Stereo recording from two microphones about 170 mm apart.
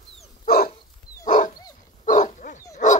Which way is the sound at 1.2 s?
50° left (ahead or behind).